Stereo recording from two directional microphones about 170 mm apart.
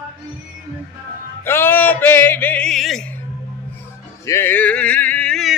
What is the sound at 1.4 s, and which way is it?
Music, 15° left (ahead or behind).